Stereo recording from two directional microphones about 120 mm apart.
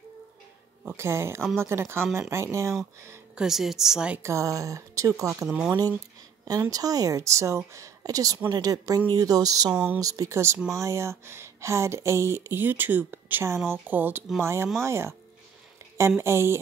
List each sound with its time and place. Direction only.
0.9 s speech: 20° right (ahead or behind)
3.3 s a woman's voice: 5° right (ahead or behind)
4.2 s speech: 25° right (ahead or behind)
5.5 s speech: 5° right (ahead or behind)
6.4 s speech: 30° right (ahead or behind)
16.2 s speech: 20° right (ahead or behind)